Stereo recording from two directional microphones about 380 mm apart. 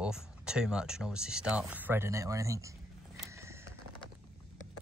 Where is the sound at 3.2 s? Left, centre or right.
Centre.